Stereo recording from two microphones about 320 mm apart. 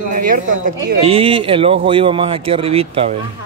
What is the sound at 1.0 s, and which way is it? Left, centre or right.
Speech, centre.